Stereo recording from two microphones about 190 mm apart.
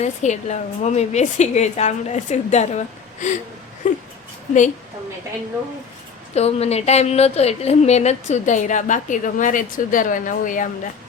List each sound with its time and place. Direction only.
0.0 s a woman's voice: 35° left (ahead or behind)
6.3 s a woman's voice: 35° left (ahead or behind)